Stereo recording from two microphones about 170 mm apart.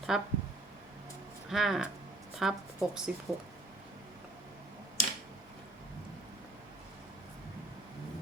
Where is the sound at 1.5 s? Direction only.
Centre (ahead or behind).